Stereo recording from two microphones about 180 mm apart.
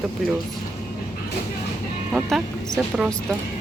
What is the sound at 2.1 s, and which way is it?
Speech, centre (ahead or behind).